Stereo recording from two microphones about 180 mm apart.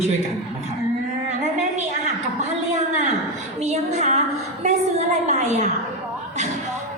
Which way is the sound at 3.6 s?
40° right (ahead or behind).